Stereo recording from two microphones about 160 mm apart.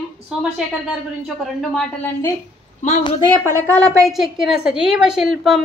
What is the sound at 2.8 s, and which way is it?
Speech, 50° left (ahead or behind).